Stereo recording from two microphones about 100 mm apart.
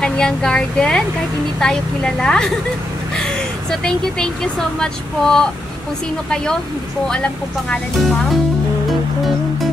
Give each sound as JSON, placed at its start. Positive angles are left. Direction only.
{"t": 0.0, "sound": "speech", "side_deg": 5}
{"t": 3.8, "sound": "speech", "side_deg": 5}